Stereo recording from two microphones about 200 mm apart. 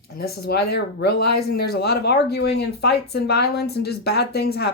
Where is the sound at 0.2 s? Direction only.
50° left (ahead or behind).